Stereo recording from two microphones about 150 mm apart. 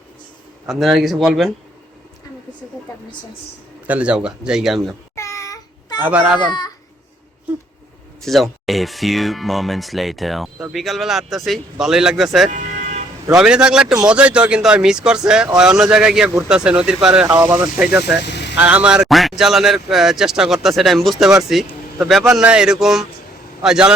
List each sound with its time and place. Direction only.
0.7 s speech: centre (ahead or behind)
3.8 s speech: 10° right (ahead or behind)
5.1 s a sound: 20° left (ahead or behind)
6.0 s speech: 10° right (ahead or behind)
6.4 s a child's voice: 30° left (ahead or behind)
8.2 s speech: centre (ahead or behind)
12.5 s music: 55° right (ahead or behind)
13.3 s speech: 5° right (ahead or behind)